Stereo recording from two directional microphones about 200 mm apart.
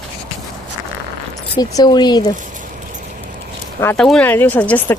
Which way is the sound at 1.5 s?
20° left (ahead or behind).